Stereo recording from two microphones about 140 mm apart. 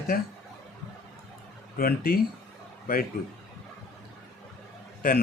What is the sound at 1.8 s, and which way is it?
Speech, 90° left.